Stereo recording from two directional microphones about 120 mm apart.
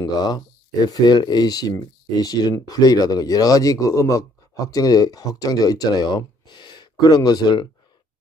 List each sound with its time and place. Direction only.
0.8 s speech: 35° left (ahead or behind)